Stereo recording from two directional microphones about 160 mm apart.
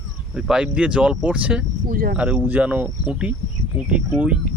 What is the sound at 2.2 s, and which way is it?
Speech, 5° right (ahead or behind).